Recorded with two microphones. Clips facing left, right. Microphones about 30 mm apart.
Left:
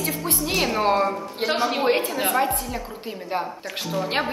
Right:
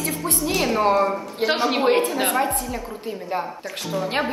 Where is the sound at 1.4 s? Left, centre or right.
Centre.